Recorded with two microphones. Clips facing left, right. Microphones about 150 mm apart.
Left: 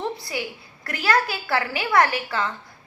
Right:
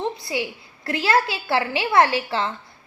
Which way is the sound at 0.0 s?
20° right (ahead or behind).